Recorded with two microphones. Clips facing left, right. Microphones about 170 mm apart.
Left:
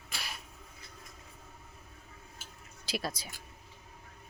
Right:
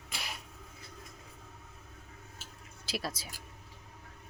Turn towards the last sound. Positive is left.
turn(degrees=-5)  # may be behind; listen again after turning